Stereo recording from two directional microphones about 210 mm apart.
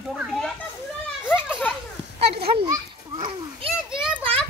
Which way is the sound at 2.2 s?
50° right (ahead or behind).